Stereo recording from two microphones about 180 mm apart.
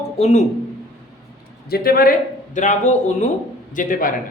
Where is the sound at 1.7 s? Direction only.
60° left (ahead or behind).